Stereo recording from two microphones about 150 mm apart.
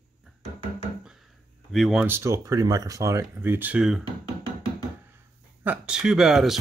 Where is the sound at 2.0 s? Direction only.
15° right (ahead or behind).